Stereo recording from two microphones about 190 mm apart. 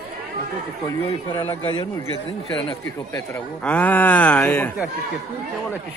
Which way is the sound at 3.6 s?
10° left (ahead or behind).